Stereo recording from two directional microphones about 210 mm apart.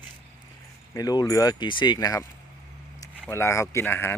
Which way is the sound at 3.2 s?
15° left (ahead or behind).